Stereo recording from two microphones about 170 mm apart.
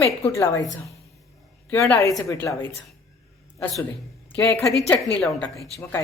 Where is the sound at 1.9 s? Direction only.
20° left (ahead or behind).